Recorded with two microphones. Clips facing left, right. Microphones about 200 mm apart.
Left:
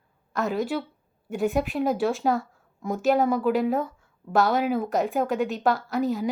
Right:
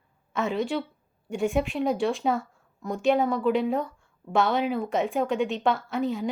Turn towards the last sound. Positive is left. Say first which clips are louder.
# left 2 dB
turn(degrees=0)  # may be behind; listen again after turning